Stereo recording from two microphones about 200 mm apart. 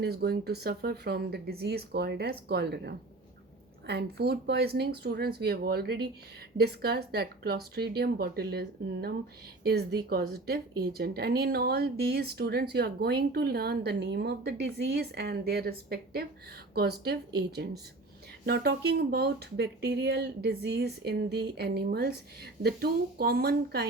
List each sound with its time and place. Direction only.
0.0 s speech: 50° right (ahead or behind)